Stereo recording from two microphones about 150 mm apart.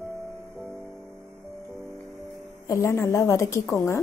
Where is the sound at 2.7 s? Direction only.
20° left (ahead or behind).